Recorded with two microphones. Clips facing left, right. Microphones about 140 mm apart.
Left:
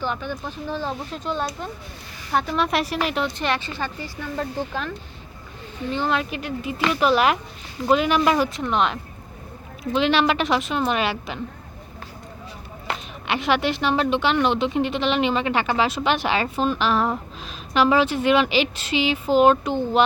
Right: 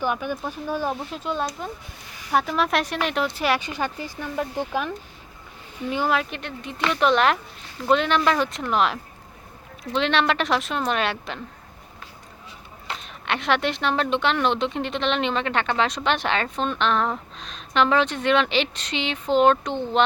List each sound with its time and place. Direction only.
0.0 s a woman's voice: 10° right (ahead or behind)
5.9 s a woman's voice: 5° right (ahead or behind)
13.2 s a woman's voice: 5° left (ahead or behind)